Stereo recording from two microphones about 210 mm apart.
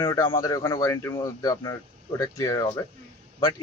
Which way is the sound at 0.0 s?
15° left (ahead or behind).